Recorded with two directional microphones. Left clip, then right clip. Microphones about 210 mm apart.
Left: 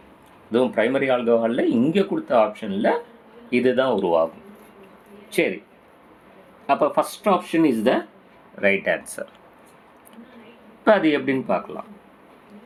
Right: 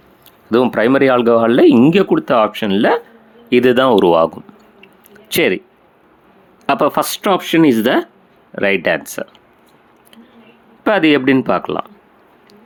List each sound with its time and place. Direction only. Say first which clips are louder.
0.5 s speech: right 7 dB; 40° right (ahead or behind)
5.3 s speech: right 8 dB; 40° right (ahead or behind)
6.7 s speech: right 5 dB; 40° right (ahead or behind)
10.8 s speech: right 5 dB; 35° right (ahead or behind)